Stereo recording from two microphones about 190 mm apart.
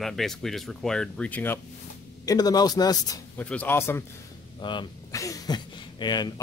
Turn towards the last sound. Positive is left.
turn(degrees=25)  # may be behind; listen again after turning